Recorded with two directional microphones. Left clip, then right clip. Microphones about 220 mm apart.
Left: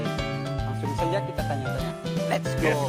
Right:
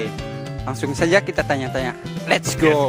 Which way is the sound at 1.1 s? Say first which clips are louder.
Right 11 dB; 45° right (ahead or behind).